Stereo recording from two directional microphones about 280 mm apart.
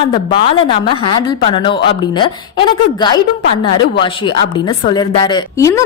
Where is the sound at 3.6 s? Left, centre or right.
Centre.